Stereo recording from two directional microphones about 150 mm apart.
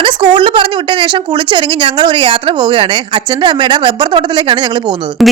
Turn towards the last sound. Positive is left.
turn(degrees=-30)  # may be behind; listen again after turning